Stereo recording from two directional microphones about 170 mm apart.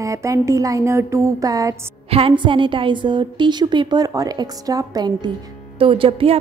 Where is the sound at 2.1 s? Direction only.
30° right (ahead or behind).